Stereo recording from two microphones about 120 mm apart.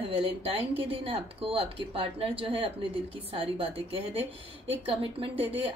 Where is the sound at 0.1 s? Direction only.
50° right (ahead or behind).